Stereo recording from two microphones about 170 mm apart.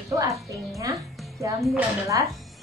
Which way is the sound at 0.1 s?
20° right (ahead or behind).